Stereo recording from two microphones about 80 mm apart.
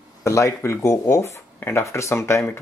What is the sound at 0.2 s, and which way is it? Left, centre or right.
Speech, left.